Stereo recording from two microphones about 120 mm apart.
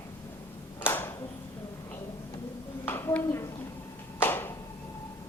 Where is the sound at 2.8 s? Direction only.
20° left (ahead or behind).